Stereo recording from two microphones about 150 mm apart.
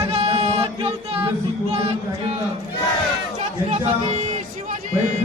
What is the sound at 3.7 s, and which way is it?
Chatter, 45° right (ahead or behind).